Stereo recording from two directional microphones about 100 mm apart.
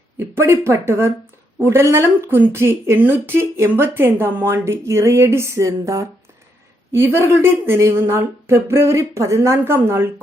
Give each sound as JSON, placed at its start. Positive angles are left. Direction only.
{"t": 0.2, "sound": "speech", "side_deg": -25}